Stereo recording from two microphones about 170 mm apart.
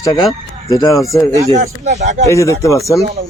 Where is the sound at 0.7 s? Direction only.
20° left (ahead or behind).